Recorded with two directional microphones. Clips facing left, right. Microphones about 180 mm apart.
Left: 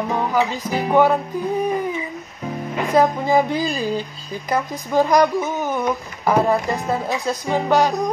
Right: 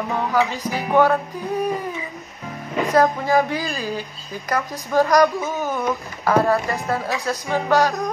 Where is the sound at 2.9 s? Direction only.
15° left (ahead or behind).